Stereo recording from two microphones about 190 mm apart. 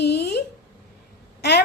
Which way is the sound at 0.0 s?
60° left (ahead or behind).